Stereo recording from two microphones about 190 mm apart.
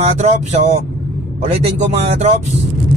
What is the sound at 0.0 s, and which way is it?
Speech, 35° right (ahead or behind).